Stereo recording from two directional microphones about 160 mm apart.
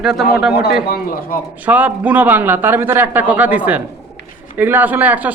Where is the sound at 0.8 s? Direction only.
70° left (ahead or behind).